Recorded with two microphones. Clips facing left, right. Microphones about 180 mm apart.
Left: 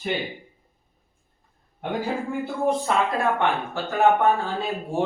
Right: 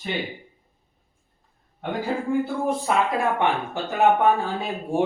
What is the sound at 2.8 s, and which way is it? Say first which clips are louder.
Speech: even; 15° right (ahead or behind).